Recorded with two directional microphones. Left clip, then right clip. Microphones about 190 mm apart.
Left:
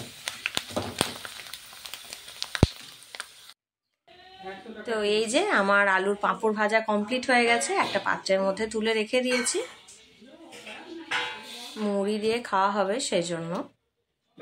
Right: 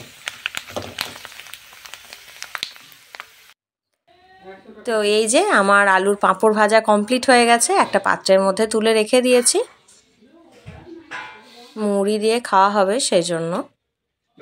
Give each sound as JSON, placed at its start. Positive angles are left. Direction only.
{"t": 0.3, "sound": "a sound", "side_deg": -20}
{"t": 4.8, "sound": "a woman's voice", "side_deg": -45}
{"t": 11.8, "sound": "a woman's voice", "side_deg": -45}